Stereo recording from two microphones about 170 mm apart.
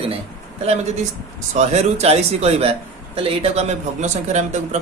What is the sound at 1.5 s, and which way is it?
Speech, 40° right (ahead or behind).